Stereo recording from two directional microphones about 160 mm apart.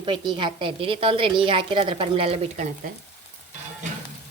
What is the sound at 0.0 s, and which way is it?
A woman's voice, 30° right (ahead or behind).